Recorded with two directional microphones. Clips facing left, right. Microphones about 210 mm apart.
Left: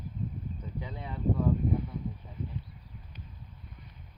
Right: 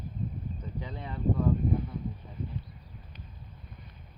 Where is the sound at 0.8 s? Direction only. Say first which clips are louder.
Even; 10° left (ahead or behind).